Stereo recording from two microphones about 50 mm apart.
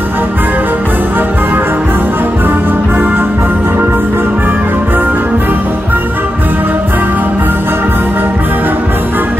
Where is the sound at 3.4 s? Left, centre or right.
Right.